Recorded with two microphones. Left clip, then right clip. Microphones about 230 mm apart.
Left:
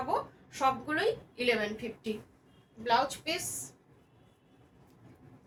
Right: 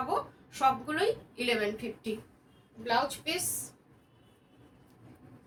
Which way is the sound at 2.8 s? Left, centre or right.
Centre.